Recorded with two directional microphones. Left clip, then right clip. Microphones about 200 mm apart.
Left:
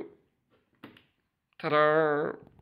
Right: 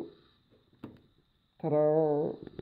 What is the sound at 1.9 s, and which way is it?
Speech, 65° left (ahead or behind).